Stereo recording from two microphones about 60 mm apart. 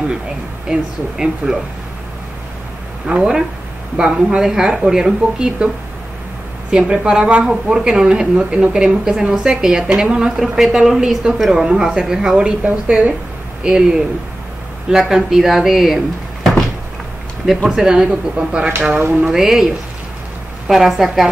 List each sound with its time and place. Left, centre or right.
0.7 s speech: centre
3.1 s speech: centre
6.7 s speech: centre
11.3 s speech: centre
11.6 s speech: centre
13.6 s speech: centre
17.6 s speech: centre
18.9 s music: right
19.2 s speech: centre